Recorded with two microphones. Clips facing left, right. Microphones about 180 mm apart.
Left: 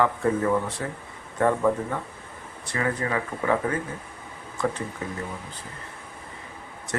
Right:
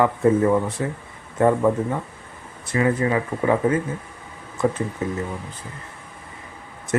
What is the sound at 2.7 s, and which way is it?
Speech, 20° right (ahead or behind).